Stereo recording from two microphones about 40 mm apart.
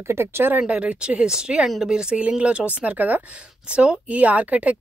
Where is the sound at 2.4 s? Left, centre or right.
Right.